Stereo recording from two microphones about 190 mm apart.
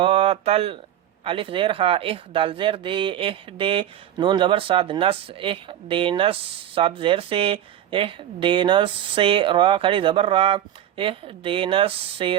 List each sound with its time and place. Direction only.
0.0 s speech: 30° right (ahead or behind)